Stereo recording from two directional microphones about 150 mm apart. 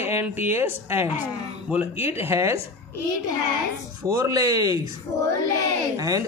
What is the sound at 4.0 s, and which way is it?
Speech, 25° right (ahead or behind).